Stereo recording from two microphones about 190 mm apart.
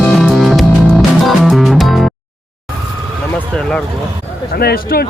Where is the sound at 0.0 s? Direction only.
Centre (ahead or behind).